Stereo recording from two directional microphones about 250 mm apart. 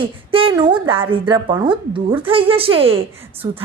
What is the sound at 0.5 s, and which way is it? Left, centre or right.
A woman's voice, centre.